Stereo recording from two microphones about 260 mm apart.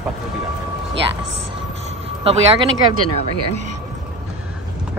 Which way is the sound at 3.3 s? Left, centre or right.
Right.